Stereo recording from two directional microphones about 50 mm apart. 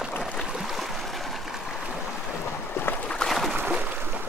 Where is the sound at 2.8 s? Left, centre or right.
Left.